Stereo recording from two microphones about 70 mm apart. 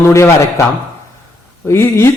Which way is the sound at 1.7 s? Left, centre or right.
Left.